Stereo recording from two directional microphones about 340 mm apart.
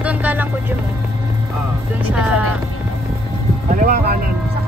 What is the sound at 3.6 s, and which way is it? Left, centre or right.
Vehicle, right.